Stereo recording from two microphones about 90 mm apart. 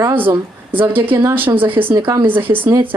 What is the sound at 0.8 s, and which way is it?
Speech, 20° right (ahead or behind).